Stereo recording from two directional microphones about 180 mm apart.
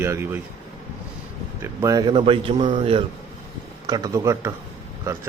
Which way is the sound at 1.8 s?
20° right (ahead or behind).